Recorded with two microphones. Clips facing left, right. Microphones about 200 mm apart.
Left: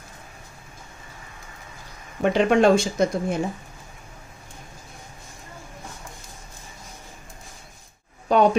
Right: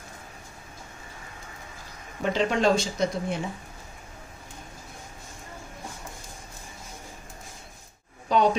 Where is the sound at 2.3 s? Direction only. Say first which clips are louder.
Left 6 dB; 55° left (ahead or behind).